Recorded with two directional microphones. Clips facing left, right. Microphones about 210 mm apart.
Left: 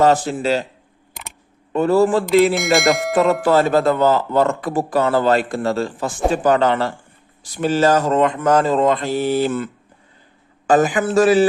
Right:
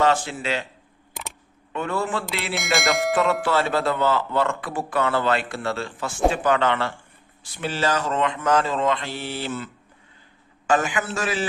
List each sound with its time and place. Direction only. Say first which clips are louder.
0.0 s speech: left 6 dB; 40° left (ahead or behind)
1.7 s speech: left 11 dB; 35° left (ahead or behind)
2.3 s a sound: left 16 dB; 45° left (ahead or behind)
2.6 s speech: left 7 dB; centre (ahead or behind)
3.4 s speech: left 7 dB; 40° left (ahead or behind)
10.7 s speech: left 7 dB; 40° left (ahead or behind)